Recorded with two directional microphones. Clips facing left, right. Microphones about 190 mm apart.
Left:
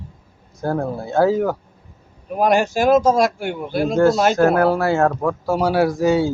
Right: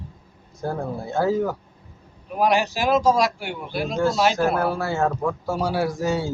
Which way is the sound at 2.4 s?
50° left (ahead or behind).